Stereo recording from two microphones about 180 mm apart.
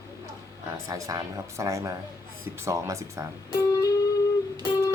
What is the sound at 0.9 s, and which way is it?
Speech, 20° right (ahead or behind).